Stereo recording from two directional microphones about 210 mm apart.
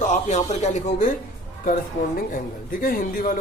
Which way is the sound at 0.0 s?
35° left (ahead or behind).